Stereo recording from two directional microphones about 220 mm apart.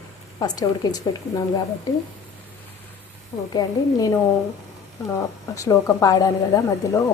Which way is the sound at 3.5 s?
15° left (ahead or behind).